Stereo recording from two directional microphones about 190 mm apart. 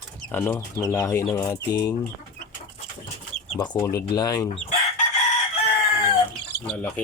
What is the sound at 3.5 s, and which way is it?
Speech, 20° left (ahead or behind).